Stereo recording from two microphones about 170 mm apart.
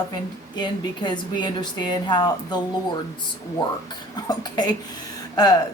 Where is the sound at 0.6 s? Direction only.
25° left (ahead or behind).